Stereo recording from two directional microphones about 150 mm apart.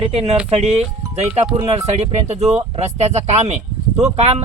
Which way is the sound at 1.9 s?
45° right (ahead or behind).